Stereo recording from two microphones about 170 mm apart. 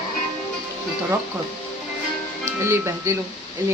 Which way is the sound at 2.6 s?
15° right (ahead or behind).